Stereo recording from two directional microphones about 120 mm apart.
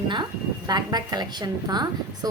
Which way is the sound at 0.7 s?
35° right (ahead or behind).